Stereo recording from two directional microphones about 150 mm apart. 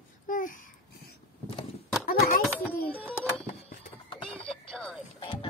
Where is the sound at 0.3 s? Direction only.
65° left (ahead or behind).